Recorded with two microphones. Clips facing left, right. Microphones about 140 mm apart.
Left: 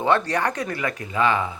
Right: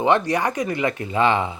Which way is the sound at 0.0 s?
15° right (ahead or behind).